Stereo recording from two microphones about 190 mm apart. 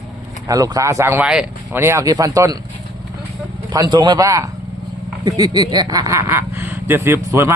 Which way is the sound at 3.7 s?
20° right (ahead or behind).